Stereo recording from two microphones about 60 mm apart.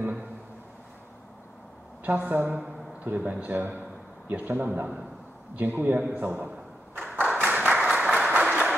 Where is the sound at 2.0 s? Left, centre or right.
Right.